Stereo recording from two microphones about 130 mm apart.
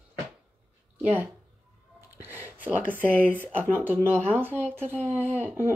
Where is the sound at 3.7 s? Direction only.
15° right (ahead or behind).